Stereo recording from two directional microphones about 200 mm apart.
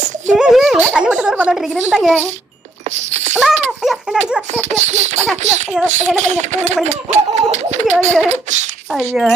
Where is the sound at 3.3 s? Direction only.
5° right (ahead or behind).